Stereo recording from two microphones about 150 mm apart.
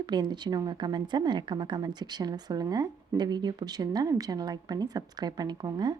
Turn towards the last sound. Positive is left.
turn(degrees=-30)  # may be behind; listen again after turning